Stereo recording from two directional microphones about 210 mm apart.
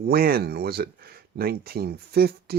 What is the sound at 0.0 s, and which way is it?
Speech, 45° right (ahead or behind).